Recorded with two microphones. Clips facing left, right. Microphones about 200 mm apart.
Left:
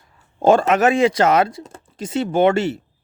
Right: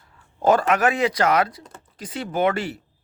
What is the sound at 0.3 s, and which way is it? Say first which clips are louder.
Speech: left 4 dB; 25° left (ahead or behind).